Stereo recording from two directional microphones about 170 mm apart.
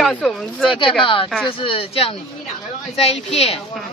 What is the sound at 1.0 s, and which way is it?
Speech, 30° left (ahead or behind).